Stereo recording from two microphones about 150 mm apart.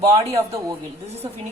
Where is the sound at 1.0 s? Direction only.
45° right (ahead or behind).